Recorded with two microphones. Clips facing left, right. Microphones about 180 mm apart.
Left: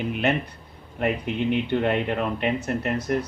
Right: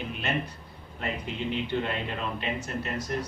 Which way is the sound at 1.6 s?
60° left (ahead or behind).